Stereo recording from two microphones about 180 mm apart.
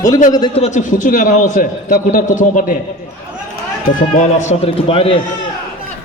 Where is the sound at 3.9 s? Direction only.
40° left (ahead or behind).